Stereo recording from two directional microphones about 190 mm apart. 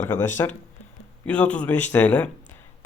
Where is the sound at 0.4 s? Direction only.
15° left (ahead or behind).